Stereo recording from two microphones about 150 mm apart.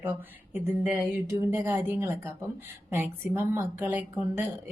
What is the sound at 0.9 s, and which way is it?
Speech, 15° right (ahead or behind).